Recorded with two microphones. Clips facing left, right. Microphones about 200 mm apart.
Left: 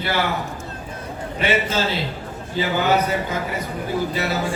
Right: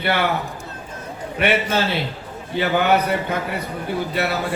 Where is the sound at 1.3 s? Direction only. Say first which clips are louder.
Right 2 dB; 60° right (ahead or behind).